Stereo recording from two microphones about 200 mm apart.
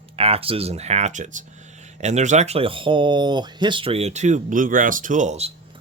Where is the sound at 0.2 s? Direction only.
30° right (ahead or behind).